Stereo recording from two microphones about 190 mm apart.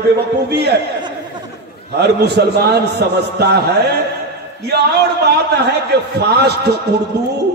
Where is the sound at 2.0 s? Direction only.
60° right (ahead or behind).